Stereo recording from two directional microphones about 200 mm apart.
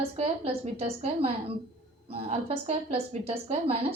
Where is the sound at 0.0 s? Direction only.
30° right (ahead or behind).